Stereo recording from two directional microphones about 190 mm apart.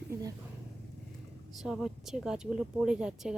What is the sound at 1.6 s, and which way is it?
Speech, centre (ahead or behind).